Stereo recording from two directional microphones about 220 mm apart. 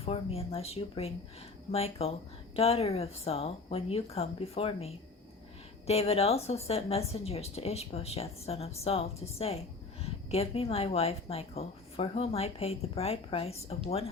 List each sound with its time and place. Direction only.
0.0 s speech: 25° left (ahead or behind)